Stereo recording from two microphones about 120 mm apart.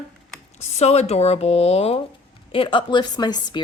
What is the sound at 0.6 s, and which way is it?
Speech, 65° left (ahead or behind).